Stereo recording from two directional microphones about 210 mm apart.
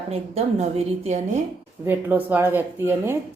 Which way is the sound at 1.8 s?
10° right (ahead or behind).